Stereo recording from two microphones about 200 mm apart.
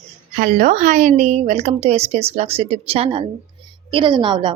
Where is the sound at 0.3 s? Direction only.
40° right (ahead or behind).